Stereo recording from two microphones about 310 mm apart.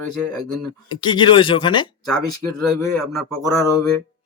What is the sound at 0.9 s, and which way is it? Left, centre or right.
A man's voice, centre.